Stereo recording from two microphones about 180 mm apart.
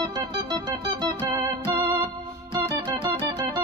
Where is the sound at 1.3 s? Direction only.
25° right (ahead or behind).